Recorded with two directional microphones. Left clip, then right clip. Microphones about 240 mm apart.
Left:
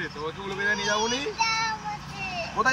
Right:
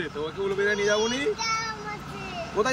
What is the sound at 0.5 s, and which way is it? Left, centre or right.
Speech, centre.